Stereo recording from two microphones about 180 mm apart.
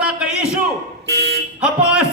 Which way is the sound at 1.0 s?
70° right (ahead or behind).